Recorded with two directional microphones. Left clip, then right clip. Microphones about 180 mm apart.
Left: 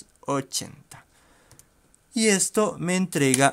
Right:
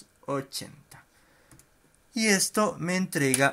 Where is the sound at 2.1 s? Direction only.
30° left (ahead or behind).